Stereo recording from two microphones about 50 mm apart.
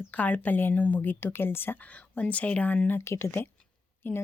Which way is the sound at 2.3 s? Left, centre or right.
Left.